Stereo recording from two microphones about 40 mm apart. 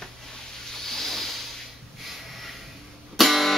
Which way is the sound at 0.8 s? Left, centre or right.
Centre.